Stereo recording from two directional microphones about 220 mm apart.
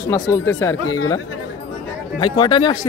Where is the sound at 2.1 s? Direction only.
20° left (ahead or behind).